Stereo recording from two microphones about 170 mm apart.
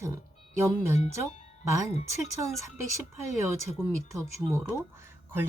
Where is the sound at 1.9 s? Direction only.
40° left (ahead or behind).